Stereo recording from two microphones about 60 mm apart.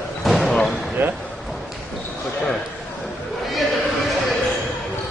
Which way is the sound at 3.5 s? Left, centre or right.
Centre.